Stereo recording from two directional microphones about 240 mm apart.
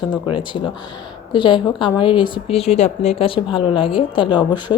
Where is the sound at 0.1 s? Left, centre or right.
Centre.